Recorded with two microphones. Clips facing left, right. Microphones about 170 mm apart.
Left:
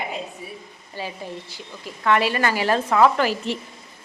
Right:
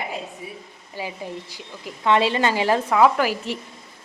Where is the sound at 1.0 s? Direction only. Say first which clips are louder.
Right 1 dB; 15° right (ahead or behind).